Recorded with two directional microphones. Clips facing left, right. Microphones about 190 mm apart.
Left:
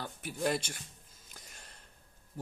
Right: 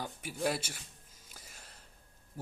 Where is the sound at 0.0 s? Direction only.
10° right (ahead or behind).